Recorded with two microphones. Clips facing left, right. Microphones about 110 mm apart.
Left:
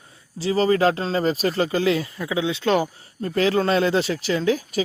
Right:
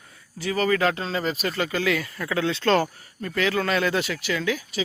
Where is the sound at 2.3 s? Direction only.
10° left (ahead or behind).